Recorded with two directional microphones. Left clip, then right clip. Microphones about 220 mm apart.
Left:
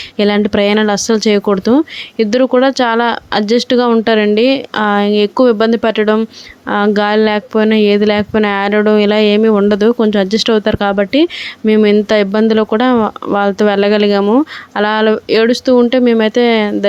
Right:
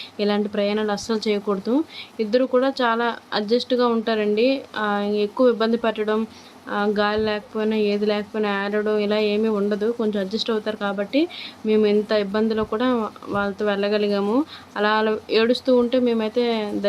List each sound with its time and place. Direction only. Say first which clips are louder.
0.2 s speech: left 10 dB; 35° left (ahead or behind)